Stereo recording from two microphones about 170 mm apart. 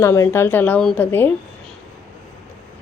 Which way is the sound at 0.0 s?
15° left (ahead or behind).